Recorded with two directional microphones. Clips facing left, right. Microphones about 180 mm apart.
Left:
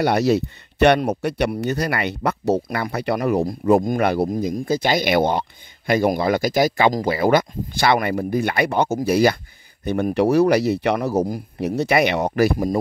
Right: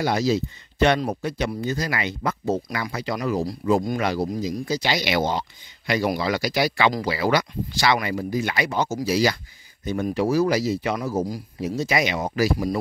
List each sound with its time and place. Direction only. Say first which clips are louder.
0.0 s speech: left 4 dB; 65° left (ahead or behind)